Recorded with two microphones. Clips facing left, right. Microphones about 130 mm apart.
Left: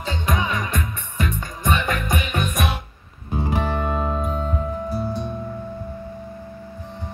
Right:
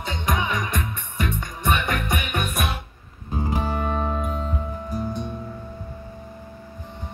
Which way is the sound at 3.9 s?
15° left (ahead or behind).